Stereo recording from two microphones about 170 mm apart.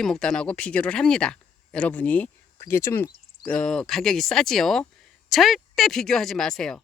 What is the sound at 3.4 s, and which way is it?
Speech, 5° left (ahead or behind).